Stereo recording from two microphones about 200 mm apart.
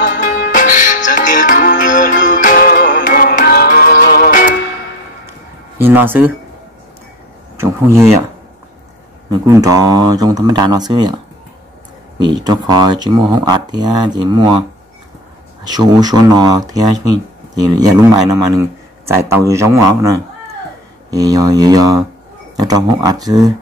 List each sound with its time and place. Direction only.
0.0 s music: 45° left (ahead or behind)
5.8 s a man's voice: 10° right (ahead or behind)
7.5 s speech: 15° right (ahead or behind)
9.3 s speech: 15° right (ahead or behind)
12.4 s speech: 20° right (ahead or behind)
15.6 s a man's voice: 20° right (ahead or behind)